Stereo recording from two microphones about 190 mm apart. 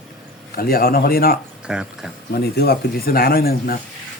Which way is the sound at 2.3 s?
55° left (ahead or behind).